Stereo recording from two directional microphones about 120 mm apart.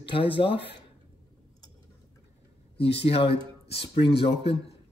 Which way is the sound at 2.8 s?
55° left (ahead or behind).